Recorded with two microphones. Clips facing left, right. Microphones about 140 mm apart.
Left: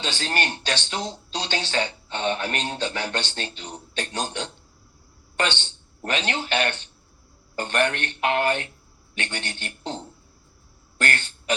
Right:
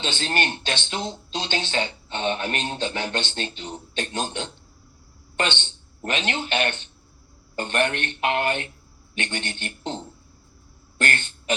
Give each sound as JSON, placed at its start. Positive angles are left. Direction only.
{"t": 0.0, "sound": "speech", "side_deg": -25}
{"t": 5.5, "sound": "a man's voice", "side_deg": -20}